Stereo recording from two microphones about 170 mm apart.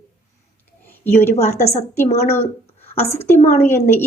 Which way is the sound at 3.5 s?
15° left (ahead or behind).